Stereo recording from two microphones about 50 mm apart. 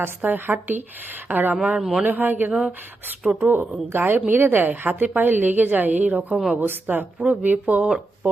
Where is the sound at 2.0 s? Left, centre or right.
Right.